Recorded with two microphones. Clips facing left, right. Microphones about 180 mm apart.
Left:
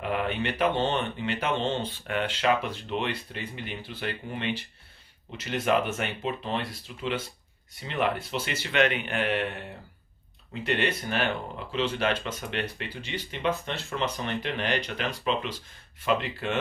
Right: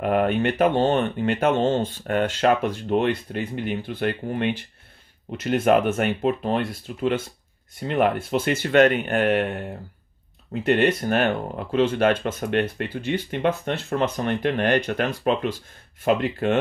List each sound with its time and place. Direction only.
0.0 s speech: 50° right (ahead or behind)